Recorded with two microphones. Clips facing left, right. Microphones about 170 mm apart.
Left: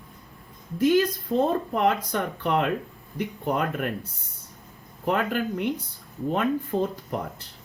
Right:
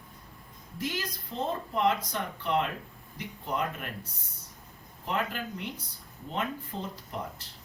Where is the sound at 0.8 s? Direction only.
55° left (ahead or behind).